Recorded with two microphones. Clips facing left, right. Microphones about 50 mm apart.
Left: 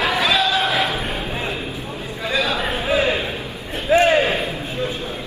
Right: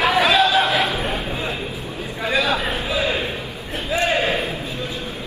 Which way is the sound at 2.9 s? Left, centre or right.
Left.